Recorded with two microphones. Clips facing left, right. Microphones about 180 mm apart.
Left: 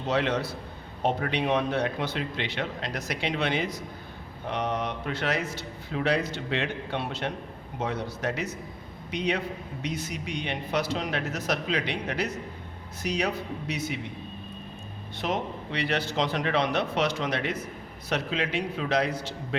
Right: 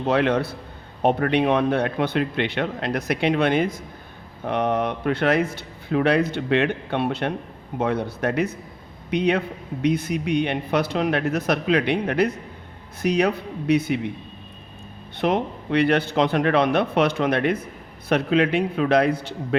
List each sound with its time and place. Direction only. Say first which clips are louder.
0.1 s a man's voice: right 6 dB; 55° right (ahead or behind)
15.2 s speech: right 8 dB; 60° right (ahead or behind)